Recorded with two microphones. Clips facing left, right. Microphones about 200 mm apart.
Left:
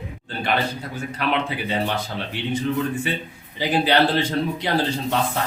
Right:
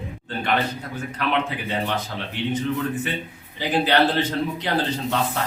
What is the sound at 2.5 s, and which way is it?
Speech, 10° left (ahead or behind).